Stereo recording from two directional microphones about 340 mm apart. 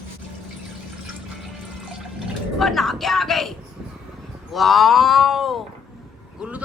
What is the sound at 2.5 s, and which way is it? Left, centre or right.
Speech, centre.